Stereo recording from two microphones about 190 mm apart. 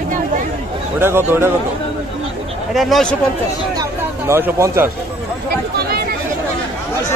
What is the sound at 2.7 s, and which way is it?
Speech, centre (ahead or behind).